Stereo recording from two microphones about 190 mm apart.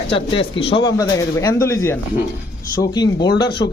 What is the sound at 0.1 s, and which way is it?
Speech, 25° left (ahead or behind).